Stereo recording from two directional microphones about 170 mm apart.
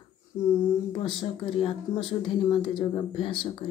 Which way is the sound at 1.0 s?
30° left (ahead or behind).